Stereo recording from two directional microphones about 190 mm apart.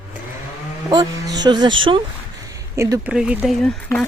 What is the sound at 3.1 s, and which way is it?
Speech, 5° right (ahead or behind).